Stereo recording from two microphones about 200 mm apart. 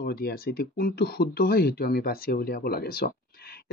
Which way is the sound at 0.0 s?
50° left (ahead or behind).